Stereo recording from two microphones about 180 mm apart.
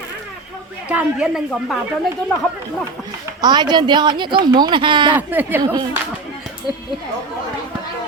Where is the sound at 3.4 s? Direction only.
25° right (ahead or behind).